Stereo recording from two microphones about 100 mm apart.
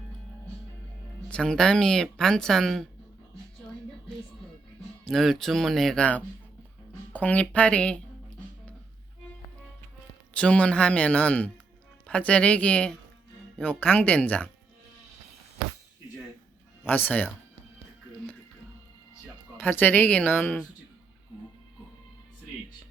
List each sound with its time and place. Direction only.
1.3 s speech: 10° left (ahead or behind)
5.0 s speech: centre (ahead or behind)
10.3 s speech: 10° left (ahead or behind)
16.8 s speech: 20° left (ahead or behind)
19.5 s speech: 20° left (ahead or behind)